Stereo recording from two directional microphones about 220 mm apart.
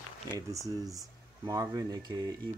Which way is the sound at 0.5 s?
15° right (ahead or behind).